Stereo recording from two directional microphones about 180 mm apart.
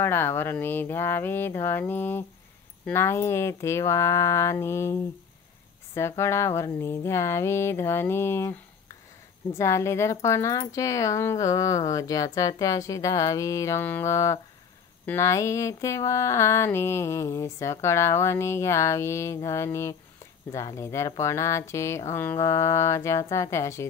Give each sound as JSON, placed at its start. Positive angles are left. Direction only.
{"t": 0.0, "sound": "speech", "side_deg": 10}
{"t": 5.9, "sound": "speech", "side_deg": 15}